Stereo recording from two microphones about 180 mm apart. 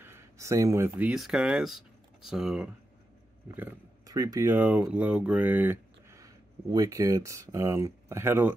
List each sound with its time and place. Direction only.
0.0 s speech: 15° right (ahead or behind)
3.5 s speech: 20° right (ahead or behind)